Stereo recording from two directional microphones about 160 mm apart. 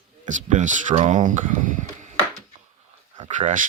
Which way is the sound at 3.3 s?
50° right (ahead or behind).